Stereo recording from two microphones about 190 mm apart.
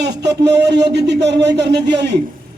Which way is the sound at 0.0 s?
65° right (ahead or behind).